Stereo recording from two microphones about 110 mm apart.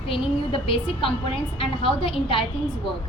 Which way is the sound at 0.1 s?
55° left (ahead or behind).